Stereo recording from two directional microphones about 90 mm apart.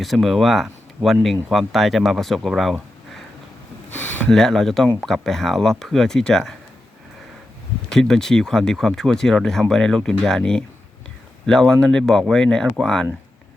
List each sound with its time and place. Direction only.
0.0 s speech: centre (ahead or behind)
3.9 s a sound: 20° left (ahead or behind)
4.3 s speech: 5° left (ahead or behind)
7.9 s speech: 5° left (ahead or behind)